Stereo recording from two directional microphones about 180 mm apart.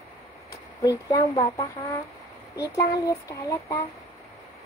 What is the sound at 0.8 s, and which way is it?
Speech, 20° left (ahead or behind).